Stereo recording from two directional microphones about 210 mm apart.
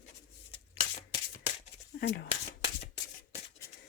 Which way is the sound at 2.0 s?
50° left (ahead or behind).